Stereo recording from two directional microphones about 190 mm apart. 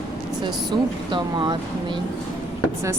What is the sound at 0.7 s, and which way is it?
Speech, 25° right (ahead or behind).